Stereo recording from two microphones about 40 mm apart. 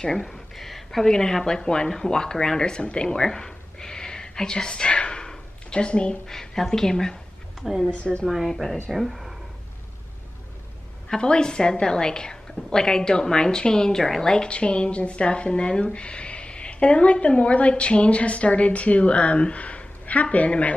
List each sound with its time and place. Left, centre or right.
0.0 s a sound: centre
1.0 s a woman's voice: centre
3.2 s a sound: centre
6.2 s a woman's voice: centre
7.6 s a woman's voice: centre
11.2 s a woman's voice: left